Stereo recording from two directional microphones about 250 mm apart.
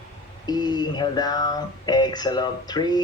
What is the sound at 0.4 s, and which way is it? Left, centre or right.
Speech, centre.